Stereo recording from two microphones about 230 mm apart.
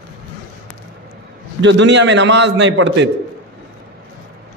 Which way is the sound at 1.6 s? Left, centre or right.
Right.